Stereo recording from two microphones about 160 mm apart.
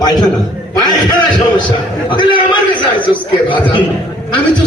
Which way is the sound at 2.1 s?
30° left (ahead or behind).